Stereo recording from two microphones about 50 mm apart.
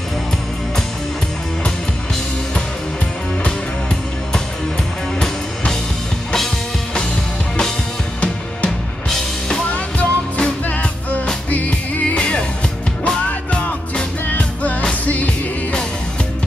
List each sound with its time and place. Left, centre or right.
9.1 s music: centre
9.7 s music: left
12.2 s music: left